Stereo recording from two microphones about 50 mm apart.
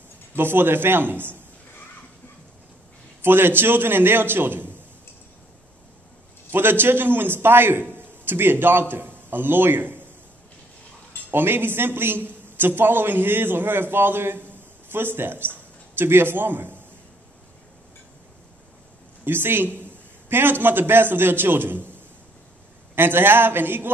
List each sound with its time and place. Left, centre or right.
0.4 s a man's voice: right
3.2 s a man's voice: right
6.5 s a man's voice: right
11.2 s a man's voice: right
14.5 s a sound: right
16.0 s a man's voice: right
19.2 s a man's voice: right
22.9 s a man's voice: right